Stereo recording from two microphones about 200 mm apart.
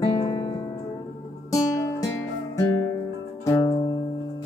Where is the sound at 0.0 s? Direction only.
20° left (ahead or behind).